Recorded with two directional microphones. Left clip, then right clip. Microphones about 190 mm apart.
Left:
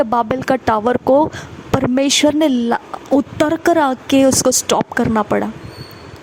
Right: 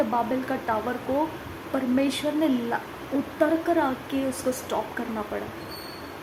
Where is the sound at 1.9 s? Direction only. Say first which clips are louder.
Left 12 dB; 60° left (ahead or behind).